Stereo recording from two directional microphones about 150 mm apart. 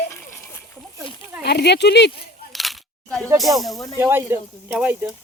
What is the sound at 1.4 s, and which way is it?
Speech, 90° left.